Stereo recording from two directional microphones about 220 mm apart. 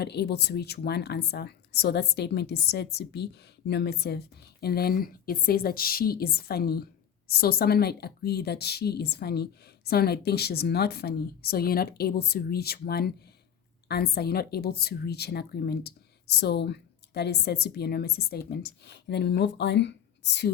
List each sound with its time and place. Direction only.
0.0 s a woman's voice: 50° left (ahead or behind)